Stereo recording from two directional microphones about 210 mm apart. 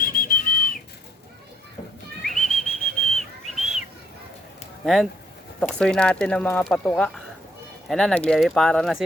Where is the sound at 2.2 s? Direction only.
Centre (ahead or behind).